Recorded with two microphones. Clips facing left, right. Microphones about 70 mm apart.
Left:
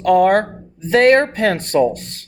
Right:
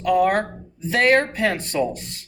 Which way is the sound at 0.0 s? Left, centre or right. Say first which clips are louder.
Left 6 dB; left.